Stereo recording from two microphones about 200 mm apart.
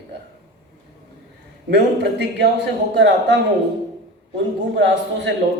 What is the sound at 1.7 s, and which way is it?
A man's voice, 60° right (ahead or behind).